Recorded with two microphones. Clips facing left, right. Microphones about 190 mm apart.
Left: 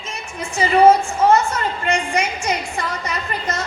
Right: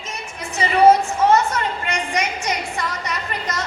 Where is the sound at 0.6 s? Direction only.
30° left (ahead or behind).